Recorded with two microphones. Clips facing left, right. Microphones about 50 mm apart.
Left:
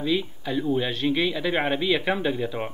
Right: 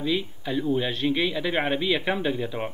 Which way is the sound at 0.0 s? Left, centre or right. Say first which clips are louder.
Left 1 dB; centre.